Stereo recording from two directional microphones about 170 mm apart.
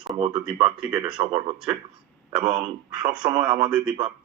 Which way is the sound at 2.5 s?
30° right (ahead or behind).